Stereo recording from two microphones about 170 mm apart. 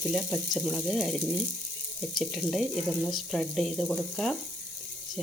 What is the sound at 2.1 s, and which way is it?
Speech, centre (ahead or behind).